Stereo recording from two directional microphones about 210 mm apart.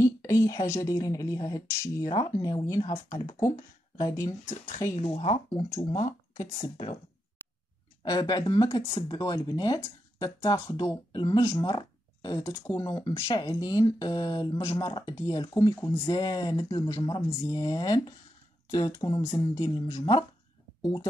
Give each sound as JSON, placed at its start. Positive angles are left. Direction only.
{"t": 0.0, "sound": "speech", "side_deg": 15}
{"t": 6.3, "sound": "speech", "side_deg": 15}
{"t": 8.0, "sound": "speech", "side_deg": 20}